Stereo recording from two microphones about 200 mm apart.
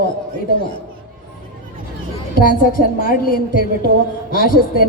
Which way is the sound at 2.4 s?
45° left (ahead or behind).